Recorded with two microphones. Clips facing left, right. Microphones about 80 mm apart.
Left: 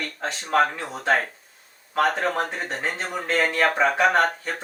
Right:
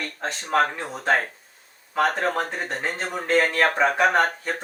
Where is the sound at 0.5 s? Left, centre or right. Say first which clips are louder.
Left 1 dB; centre.